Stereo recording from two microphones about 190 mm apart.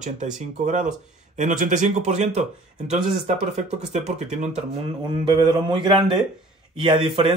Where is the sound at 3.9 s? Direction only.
35° right (ahead or behind).